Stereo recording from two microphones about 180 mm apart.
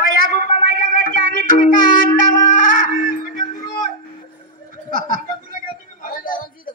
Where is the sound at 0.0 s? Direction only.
55° left (ahead or behind).